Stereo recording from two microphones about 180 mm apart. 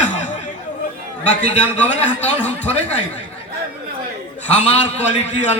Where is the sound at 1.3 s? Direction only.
40° left (ahead or behind).